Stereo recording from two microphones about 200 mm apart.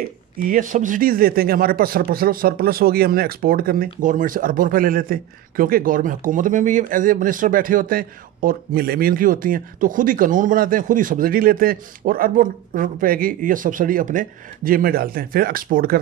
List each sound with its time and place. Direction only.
0.5 s speech: 40° right (ahead or behind)